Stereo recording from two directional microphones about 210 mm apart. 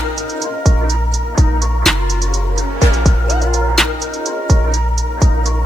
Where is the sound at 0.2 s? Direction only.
Centre (ahead or behind).